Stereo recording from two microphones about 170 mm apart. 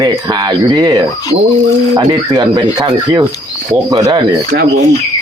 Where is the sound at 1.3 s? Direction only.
90° right.